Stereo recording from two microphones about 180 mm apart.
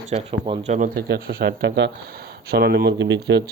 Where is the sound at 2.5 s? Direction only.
65° right (ahead or behind).